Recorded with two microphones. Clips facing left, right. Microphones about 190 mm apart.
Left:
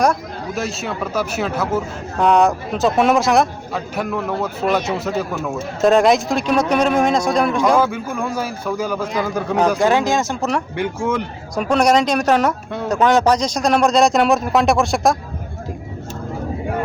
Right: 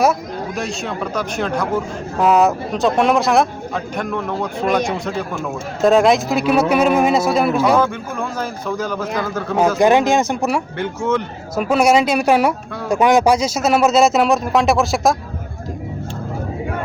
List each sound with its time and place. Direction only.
0.0 s speech: centre (ahead or behind)
7.8 s a man's voice: 10° left (ahead or behind)
9.7 s speech: 20° right (ahead or behind)
10.8 s a man's voice: 10° left (ahead or behind)
11.5 s speech: 5° right (ahead or behind)